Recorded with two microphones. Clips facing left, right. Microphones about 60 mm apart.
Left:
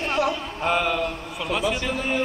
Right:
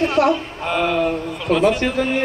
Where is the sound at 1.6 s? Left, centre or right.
Right.